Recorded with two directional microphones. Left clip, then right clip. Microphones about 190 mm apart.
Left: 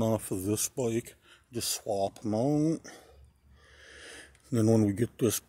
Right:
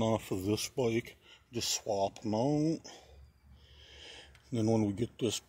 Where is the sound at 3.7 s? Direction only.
45° left (ahead or behind).